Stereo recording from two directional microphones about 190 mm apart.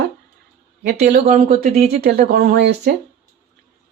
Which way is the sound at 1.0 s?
50° right (ahead or behind).